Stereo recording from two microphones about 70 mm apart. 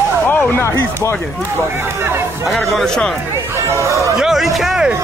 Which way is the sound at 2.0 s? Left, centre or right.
Right.